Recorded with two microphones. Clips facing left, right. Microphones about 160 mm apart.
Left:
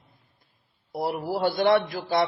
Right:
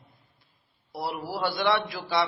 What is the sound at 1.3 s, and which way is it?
Speech, 45° left (ahead or behind).